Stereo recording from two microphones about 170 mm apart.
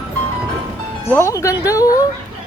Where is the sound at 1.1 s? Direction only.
15° left (ahead or behind).